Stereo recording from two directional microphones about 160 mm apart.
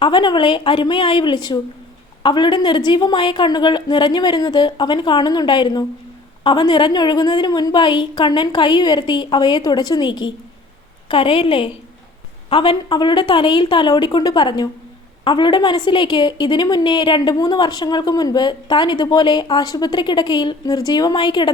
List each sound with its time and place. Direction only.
0.0 s a woman's voice: 30° left (ahead or behind)